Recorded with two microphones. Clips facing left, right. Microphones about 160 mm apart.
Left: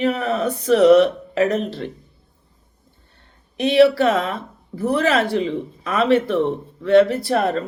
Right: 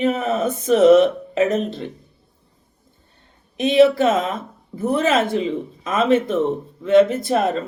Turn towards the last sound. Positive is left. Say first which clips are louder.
# right 1 dB
turn(degrees=-20)  # may be behind; listen again after turning